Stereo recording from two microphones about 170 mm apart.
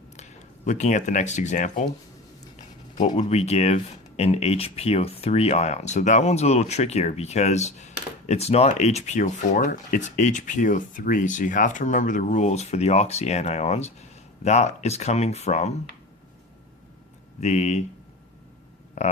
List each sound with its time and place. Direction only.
0.2 s speech: 45° left (ahead or behind)
3.2 s speech: 40° left (ahead or behind)
17.4 s speech: 40° left (ahead or behind)
19.0 s speech: 45° left (ahead or behind)